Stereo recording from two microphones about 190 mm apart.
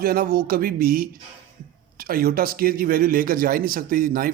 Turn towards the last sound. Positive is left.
turn(degrees=-50)  # may be behind; listen again after turning